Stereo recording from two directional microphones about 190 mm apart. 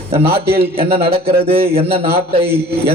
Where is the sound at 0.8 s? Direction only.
30° right (ahead or behind).